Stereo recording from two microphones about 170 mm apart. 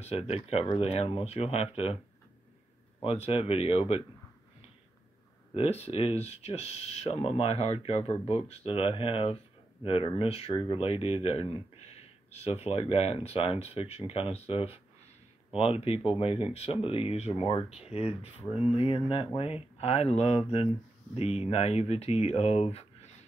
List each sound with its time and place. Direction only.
0.0 s speech: 35° left (ahead or behind)
3.0 s speech: 35° left (ahead or behind)
5.5 s speech: 35° left (ahead or behind)